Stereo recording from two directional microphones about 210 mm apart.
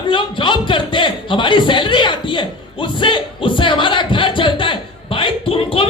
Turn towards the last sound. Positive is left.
turn(degrees=25)  # may be behind; listen again after turning